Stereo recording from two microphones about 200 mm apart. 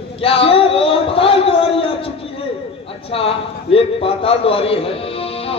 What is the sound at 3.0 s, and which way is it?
A man's voice, 30° left (ahead or behind).